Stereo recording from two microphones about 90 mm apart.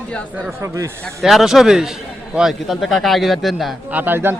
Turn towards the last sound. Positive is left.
turn(degrees=-25)  # may be behind; listen again after turning